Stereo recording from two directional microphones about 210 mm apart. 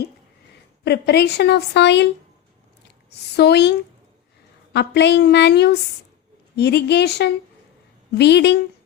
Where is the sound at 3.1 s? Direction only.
50° left (ahead or behind).